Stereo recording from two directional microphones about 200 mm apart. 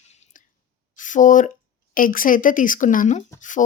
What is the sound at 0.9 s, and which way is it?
A woman's voice, 40° left (ahead or behind).